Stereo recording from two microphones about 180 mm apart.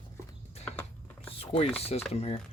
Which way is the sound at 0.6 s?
10° left (ahead or behind).